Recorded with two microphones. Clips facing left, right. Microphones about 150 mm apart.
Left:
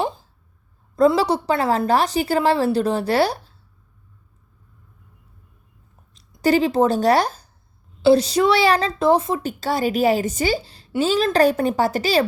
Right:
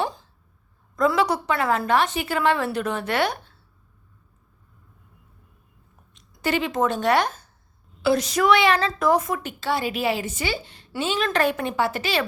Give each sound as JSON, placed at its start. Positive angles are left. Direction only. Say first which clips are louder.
{"t": 0.9, "sound": "a woman's voice", "louder": "left 5 dB", "side_deg": 30}
{"t": 6.1, "sound": "a woman's voice", "louder": "left 7 dB", "side_deg": 35}